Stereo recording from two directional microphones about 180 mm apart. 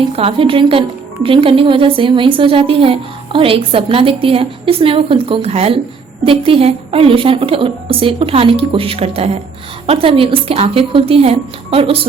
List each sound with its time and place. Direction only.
0.2 s speech: 30° right (ahead or behind)